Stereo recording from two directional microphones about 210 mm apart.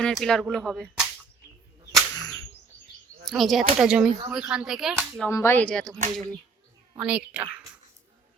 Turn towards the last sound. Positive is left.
turn(degrees=-5)  # may be behind; listen again after turning